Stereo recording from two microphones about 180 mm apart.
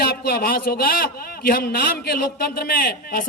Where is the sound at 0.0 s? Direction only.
60° left (ahead or behind).